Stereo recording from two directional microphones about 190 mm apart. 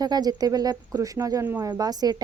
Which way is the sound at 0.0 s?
20° right (ahead or behind).